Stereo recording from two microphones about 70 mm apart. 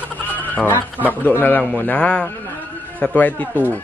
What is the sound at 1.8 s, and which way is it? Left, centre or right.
A man's voice, left.